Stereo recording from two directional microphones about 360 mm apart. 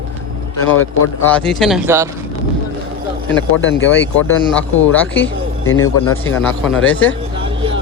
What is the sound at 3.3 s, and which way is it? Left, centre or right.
Speech, left.